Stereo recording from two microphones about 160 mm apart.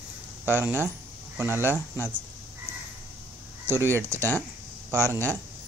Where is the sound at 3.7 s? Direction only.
15° right (ahead or behind).